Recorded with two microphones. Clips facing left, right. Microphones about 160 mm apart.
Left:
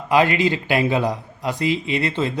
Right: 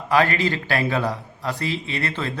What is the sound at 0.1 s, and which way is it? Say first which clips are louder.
A man's voice: left 3 dB; 20° left (ahead or behind).